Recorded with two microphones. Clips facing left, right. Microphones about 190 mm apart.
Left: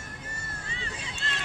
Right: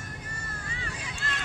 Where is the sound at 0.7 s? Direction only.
25° left (ahead or behind).